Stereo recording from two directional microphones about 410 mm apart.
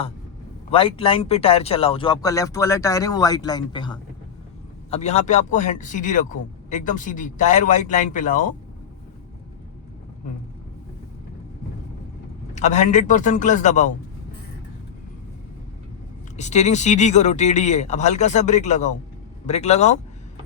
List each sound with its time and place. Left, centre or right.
0.7 s speech: centre
12.5 s speech: centre
16.4 s speech: centre